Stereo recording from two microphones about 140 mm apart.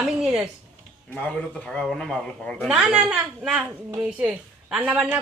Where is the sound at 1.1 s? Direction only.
10° left (ahead or behind).